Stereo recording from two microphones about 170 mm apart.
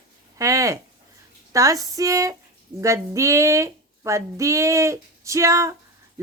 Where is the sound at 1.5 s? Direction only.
20° right (ahead or behind).